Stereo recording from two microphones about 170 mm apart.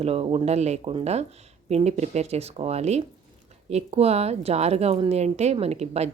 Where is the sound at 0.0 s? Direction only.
35° right (ahead or behind).